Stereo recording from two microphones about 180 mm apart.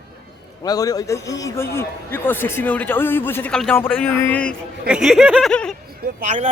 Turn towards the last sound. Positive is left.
turn(degrees=-40)  # may be behind; listen again after turning